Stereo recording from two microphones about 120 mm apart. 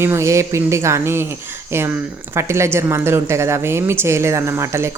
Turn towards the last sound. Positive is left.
turn(degrees=-20)  # may be behind; listen again after turning